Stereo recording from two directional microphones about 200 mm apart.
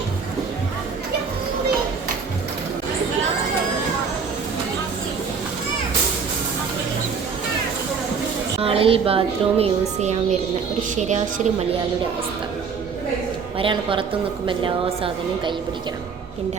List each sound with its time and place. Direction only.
8.6 s a woman's voice: 30° right (ahead or behind)
13.6 s speech: 25° right (ahead or behind)